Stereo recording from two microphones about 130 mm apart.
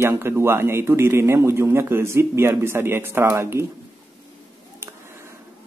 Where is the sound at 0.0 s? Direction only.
20° right (ahead or behind).